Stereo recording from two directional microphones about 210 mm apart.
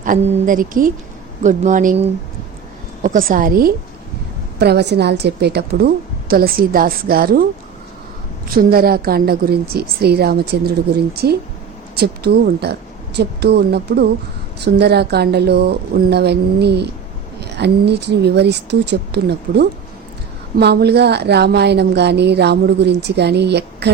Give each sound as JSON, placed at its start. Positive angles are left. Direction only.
{"t": 0.0, "sound": "a woman's voice", "side_deg": -40}
{"t": 8.4, "sound": "a woman's voice", "side_deg": -45}